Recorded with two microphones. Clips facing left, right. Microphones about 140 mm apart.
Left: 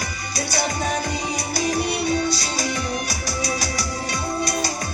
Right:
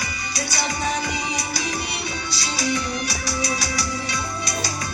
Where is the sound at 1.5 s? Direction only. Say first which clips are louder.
Left 6 dB; 45° left (ahead or behind).